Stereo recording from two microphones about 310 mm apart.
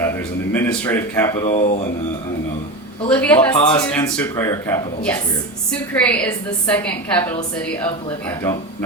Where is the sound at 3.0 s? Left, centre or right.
Centre.